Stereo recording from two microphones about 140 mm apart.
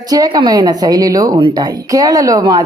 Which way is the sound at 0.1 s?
25° right (ahead or behind).